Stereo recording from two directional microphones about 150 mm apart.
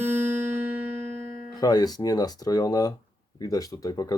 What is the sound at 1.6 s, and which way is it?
Speech, 25° left (ahead or behind).